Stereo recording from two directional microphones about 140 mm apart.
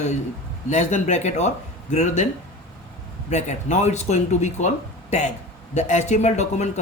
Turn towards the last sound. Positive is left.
turn(degrees=55)  # may be behind; listen again after turning